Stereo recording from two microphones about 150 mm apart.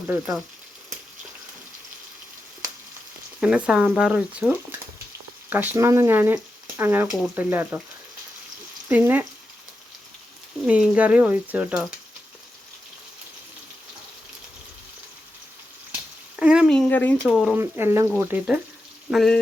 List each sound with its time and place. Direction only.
3.4 s speech: 5° right (ahead or behind)
8.9 s speech: 10° right (ahead or behind)
10.7 s speech: 5° right (ahead or behind)
16.4 s a sound: 5° right (ahead or behind)
16.6 s a sound: 5° left (ahead or behind)
17.2 s speech: centre (ahead or behind)
17.5 s speech: 15° right (ahead or behind)
19.1 s speech: centre (ahead or behind)